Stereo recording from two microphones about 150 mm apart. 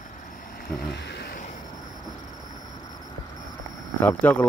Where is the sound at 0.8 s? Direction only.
90° left.